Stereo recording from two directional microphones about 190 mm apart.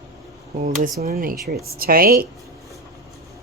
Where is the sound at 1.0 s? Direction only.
50° right (ahead or behind).